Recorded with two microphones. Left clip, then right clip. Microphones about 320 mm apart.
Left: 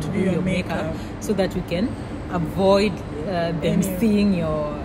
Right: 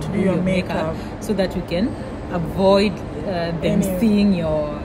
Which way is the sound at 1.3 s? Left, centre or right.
Centre.